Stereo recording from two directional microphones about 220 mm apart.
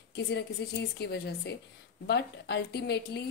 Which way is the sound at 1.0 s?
50° left (ahead or behind).